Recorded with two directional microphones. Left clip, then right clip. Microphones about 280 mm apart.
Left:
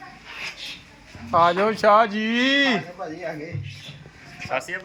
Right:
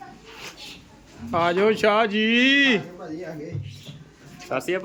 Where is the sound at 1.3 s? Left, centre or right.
Centre.